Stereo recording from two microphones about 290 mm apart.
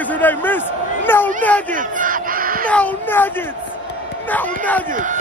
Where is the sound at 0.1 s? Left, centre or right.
Centre.